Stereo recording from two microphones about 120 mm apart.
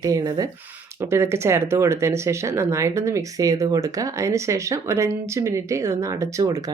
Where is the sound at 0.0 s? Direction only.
30° right (ahead or behind).